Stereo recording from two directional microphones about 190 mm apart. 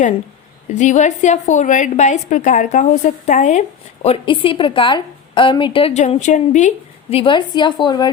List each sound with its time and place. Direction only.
0.7 s a woman's voice: 40° left (ahead or behind); by 8.1 s 20° left (ahead or behind)